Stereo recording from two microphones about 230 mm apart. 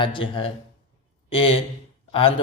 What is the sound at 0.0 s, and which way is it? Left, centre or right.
Speech, left.